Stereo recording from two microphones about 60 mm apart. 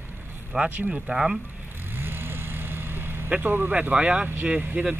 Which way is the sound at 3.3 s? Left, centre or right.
Right.